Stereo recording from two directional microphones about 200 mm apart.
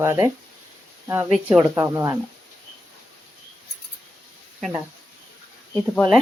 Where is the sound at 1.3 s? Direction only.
5° right (ahead or behind).